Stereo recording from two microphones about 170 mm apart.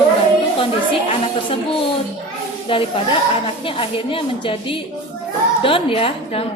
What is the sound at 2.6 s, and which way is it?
A woman's voice, 30° left (ahead or behind).